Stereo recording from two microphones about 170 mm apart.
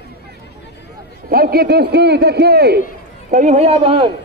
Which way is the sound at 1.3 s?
60° right (ahead or behind).